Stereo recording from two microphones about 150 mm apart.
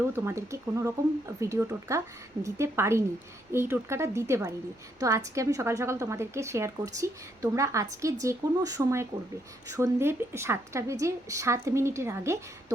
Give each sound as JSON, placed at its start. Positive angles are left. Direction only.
{"t": 0.3, "sound": "a woman's voice", "side_deg": -20}